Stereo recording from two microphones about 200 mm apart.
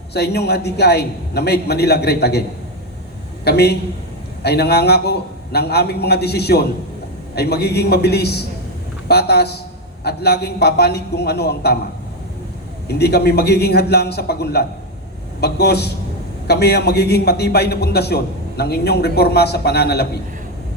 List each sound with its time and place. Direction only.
0.1 s a man's voice: 55° left (ahead or behind)
3.4 s a man's voice: 55° left (ahead or behind)
12.9 s a man's voice: 55° left (ahead or behind)